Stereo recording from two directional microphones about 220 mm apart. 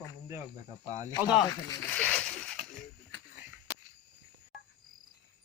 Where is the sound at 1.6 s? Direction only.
10° left (ahead or behind).